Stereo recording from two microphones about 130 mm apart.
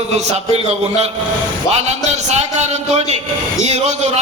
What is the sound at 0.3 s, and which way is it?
Speech, 55° right (ahead or behind).